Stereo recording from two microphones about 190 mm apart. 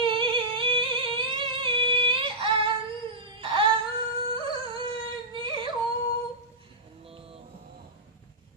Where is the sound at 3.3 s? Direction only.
25° right (ahead or behind).